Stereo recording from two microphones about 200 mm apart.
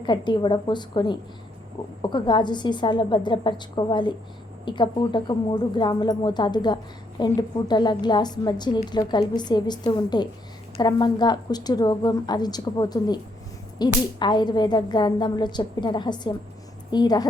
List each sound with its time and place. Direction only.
0.0 s a woman's voice: 25° left (ahead or behind)